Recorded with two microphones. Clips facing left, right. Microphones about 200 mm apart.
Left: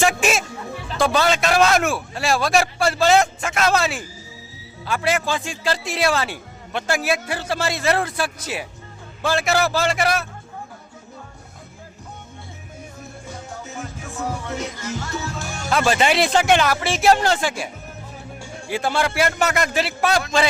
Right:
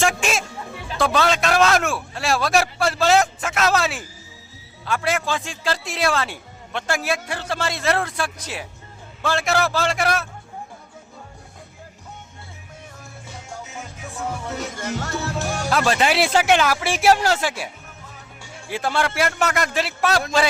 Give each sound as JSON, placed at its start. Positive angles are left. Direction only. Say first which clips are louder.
{"t": 0.0, "sound": "a man's voice", "louder": "left 2 dB", "side_deg": 5}
{"t": 14.8, "sound": "music", "louder": "right 2 dB", "side_deg": -55}
{"t": 15.4, "sound": "music", "louder": "right 5 dB", "side_deg": -35}
{"t": 15.7, "sound": "a man's voice", "louder": "left 2 dB", "side_deg": 0}
{"t": 18.7, "sound": "a man's voice", "louder": "left 1 dB", "side_deg": 0}